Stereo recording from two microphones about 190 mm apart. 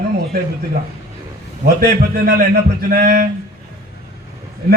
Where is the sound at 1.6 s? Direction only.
50° right (ahead or behind).